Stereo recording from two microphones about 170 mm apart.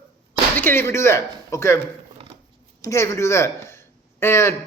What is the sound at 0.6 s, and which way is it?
Speech, 15° left (ahead or behind).